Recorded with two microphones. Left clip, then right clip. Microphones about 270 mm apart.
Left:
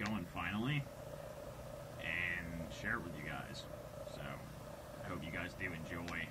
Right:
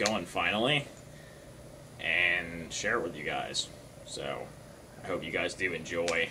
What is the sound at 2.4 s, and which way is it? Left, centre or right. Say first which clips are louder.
Speech: right 10 dB; centre.